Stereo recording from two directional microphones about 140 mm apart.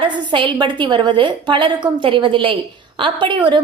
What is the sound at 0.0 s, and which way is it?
A woman's voice, 35° right (ahead or behind).